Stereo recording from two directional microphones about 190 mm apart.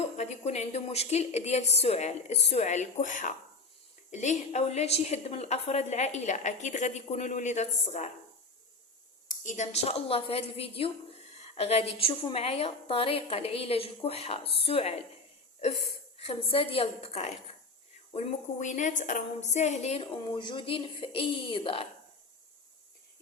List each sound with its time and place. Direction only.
0.0 s a woman's voice: 35° left (ahead or behind)
9.3 s a woman's voice: 40° left (ahead or behind)
16.1 s a woman's voice: 30° left (ahead or behind)